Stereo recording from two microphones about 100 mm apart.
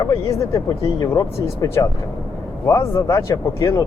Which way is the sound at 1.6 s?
40° left (ahead or behind).